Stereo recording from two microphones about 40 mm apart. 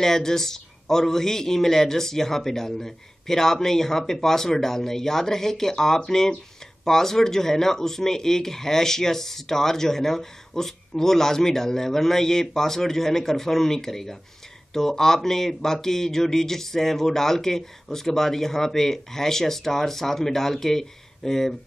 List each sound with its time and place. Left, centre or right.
0.0 s speech: centre